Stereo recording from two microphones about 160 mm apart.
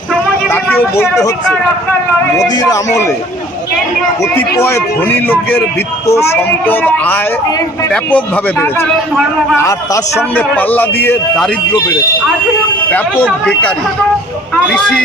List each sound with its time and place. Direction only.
0.5 s vehicle: 15° left (ahead or behind)
2.4 s speech: 20° left (ahead or behind)
4.4 s a man's voice: 15° left (ahead or behind)
14.7 s a man's voice: 5° left (ahead or behind)